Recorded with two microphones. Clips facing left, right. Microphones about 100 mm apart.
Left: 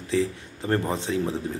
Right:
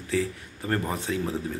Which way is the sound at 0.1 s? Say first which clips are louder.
Left 3 dB; 25° left (ahead or behind).